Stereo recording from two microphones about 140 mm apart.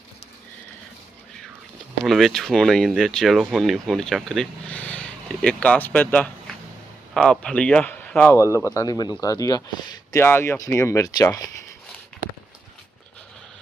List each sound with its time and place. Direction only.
2.0 s speech: centre (ahead or behind); by 11.5 s 25° left (ahead or behind)